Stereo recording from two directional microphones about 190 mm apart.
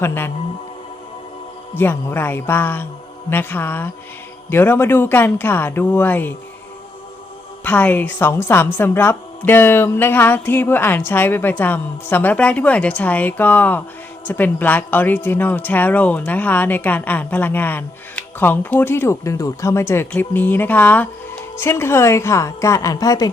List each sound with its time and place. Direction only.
0.0 s speech: 10° left (ahead or behind)
1.7 s speech: 10° left (ahead or behind)
7.6 s speech: 10° left (ahead or behind)